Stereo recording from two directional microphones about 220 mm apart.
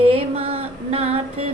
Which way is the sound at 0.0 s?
25° right (ahead or behind).